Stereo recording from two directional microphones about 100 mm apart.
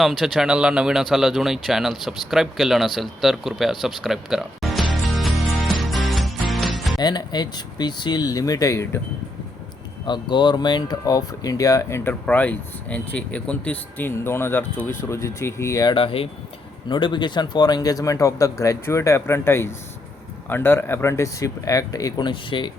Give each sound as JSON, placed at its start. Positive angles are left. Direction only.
{"t": 0.0, "sound": "speech", "side_deg": 0}
{"t": 6.5, "sound": "music", "side_deg": 0}
{"t": 7.0, "sound": "speech", "side_deg": 45}
{"t": 10.1, "sound": "speech", "side_deg": 50}
{"t": 12.2, "sound": "speech", "side_deg": 15}
{"t": 15.9, "sound": "speech", "side_deg": 60}
{"t": 16.9, "sound": "speech", "side_deg": 50}
{"t": 22.3, "sound": "speech", "side_deg": 55}